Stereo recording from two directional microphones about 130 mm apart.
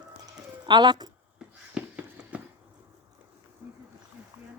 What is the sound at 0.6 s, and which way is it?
Speech, 35° right (ahead or behind).